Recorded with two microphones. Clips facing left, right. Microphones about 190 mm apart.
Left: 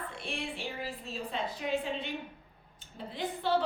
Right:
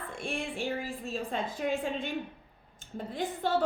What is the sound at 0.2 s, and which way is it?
A woman's voice, 45° right (ahead or behind).